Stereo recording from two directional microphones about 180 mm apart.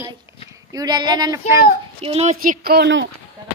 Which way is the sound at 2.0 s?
35° right (ahead or behind).